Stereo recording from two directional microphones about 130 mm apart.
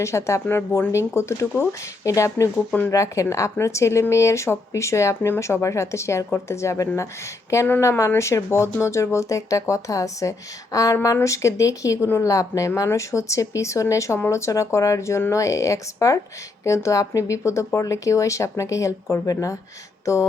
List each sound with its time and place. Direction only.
0.0 s speech: 20° left (ahead or behind)